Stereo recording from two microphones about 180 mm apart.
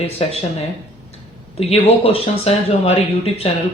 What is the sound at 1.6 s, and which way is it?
Speech, 35° left (ahead or behind).